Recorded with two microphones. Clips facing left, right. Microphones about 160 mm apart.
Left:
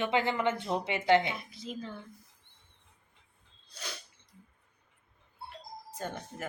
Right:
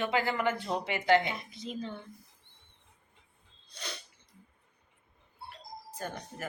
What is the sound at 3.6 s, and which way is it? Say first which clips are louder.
Sneeze: right 1 dB; 5° left (ahead or behind).